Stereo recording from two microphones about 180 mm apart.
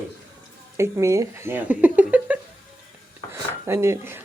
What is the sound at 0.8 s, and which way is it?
Speech, 15° right (ahead or behind).